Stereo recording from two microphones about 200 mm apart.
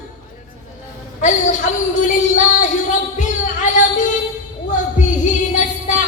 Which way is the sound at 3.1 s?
40° left (ahead or behind).